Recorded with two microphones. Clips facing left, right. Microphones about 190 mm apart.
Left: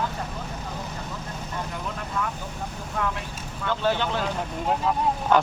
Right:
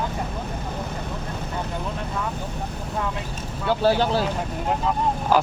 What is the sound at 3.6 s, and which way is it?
Speech, 35° right (ahead or behind).